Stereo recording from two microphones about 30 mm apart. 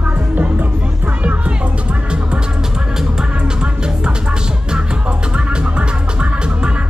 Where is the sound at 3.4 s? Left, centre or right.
Right.